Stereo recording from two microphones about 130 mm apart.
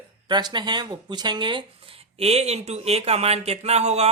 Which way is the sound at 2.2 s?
55° right (ahead or behind).